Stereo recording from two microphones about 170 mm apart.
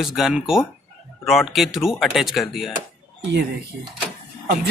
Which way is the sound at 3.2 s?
80° right.